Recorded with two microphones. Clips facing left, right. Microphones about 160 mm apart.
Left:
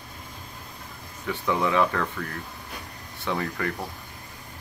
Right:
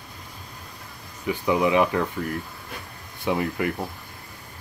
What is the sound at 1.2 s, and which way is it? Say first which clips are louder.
Speech: right 4 dB; 15° right (ahead or behind).